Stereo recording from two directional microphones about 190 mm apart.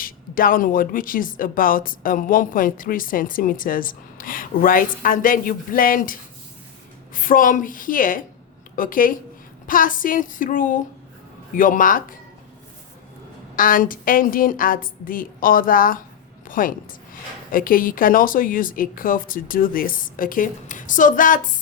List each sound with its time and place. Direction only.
0.0 s speech: 45° left (ahead or behind)
13.6 s a woman's voice: 45° left (ahead or behind)